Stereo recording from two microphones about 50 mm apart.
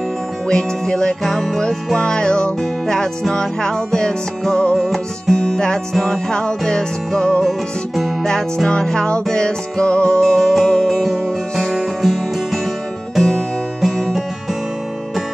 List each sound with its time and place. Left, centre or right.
0.5 s music: centre
2.0 s music: centre
4.7 s music: centre
6.0 s music: centre
7.4 s music: centre
8.3 s music: centre
10.2 s music: centre